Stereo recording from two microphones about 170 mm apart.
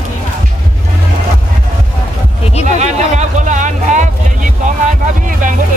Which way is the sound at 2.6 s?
45° right (ahead or behind).